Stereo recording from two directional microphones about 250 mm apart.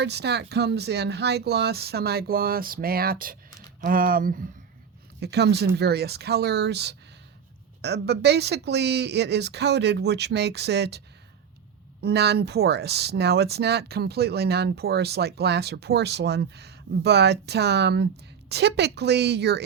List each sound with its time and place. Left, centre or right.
0.0 s speech: right